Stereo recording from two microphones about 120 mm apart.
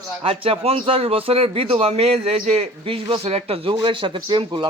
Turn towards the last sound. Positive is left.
turn(degrees=-40)  # may be behind; listen again after turning